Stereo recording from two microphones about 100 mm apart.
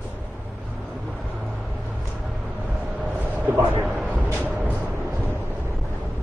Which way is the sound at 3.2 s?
15° right (ahead or behind).